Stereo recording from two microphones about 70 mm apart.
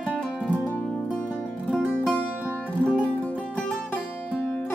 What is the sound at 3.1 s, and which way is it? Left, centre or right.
Music, centre.